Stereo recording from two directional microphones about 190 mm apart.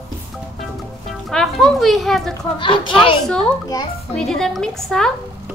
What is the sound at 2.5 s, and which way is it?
Speech, 25° left (ahead or behind).